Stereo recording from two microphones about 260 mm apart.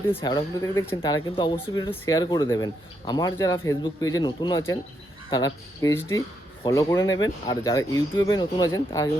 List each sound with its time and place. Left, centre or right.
0.2 s speech: centre